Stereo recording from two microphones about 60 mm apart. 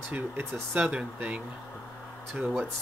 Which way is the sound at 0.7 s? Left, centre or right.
Right.